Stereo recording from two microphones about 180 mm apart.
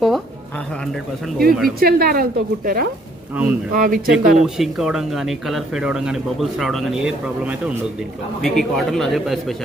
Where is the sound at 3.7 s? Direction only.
50° right (ahead or behind).